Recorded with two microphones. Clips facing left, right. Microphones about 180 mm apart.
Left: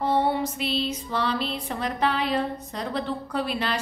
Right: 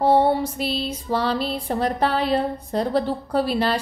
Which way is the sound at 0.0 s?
35° right (ahead or behind).